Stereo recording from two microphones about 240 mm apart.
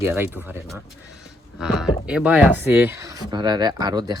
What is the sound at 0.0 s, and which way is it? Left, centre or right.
Speech, centre.